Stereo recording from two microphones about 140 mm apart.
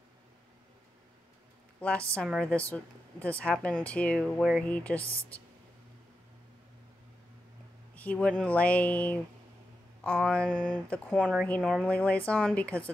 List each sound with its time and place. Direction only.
1.8 s speech: 10° left (ahead or behind)
7.9 s speech: 10° left (ahead or behind)